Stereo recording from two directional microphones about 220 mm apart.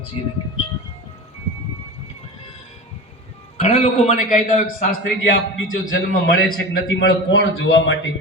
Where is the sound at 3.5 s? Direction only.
30° left (ahead or behind).